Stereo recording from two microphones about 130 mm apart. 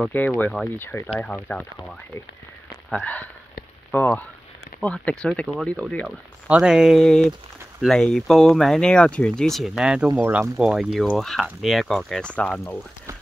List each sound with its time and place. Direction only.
0.0 s speech: 15° left (ahead or behind)
0.4 s speech: centre (ahead or behind)
0.7 s speech: 20° left (ahead or behind)
6.0 s speech: 10° right (ahead or behind); by 12.7 s 10° left (ahead or behind)